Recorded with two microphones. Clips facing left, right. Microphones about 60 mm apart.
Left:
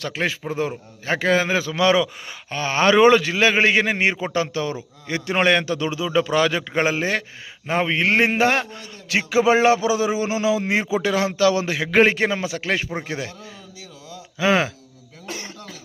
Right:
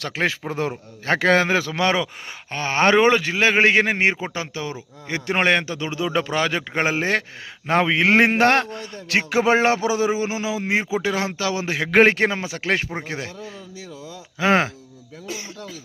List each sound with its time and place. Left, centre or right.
0.0 s a man's voice: right
1.8 s a man's voice: right
4.2 s speech: centre
5.2 s a man's voice: right
7.7 s speech: right
8.3 s a man's voice: right
11.8 s a man's voice: right
14.3 s a man's voice: right
15.3 s cough: left